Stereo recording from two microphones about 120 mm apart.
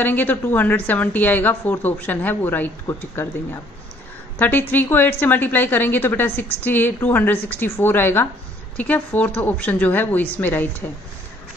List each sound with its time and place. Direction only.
0.0 s a woman's voice: 15° left (ahead or behind)
4.4 s a woman's voice: 15° left (ahead or behind)